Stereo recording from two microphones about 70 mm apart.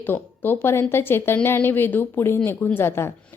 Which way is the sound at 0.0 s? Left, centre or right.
Left.